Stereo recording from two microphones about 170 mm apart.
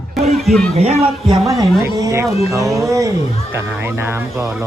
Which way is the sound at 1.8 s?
20° right (ahead or behind).